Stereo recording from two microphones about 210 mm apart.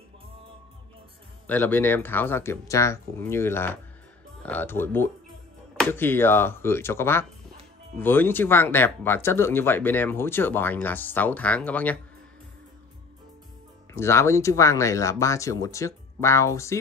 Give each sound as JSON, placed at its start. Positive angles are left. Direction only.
{"t": 1.5, "sound": "speech", "side_deg": 10}
{"t": 13.9, "sound": "speech", "side_deg": 10}